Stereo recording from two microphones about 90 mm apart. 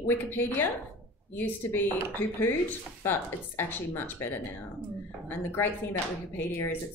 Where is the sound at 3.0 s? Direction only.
25° left (ahead or behind).